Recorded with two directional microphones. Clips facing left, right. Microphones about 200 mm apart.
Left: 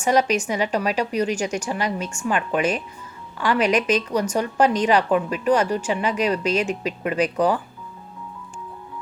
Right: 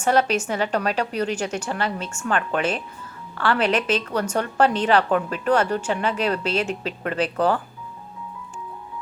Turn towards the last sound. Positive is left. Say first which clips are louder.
# left 1 dB
turn(degrees=10)  # may be behind; listen again after turning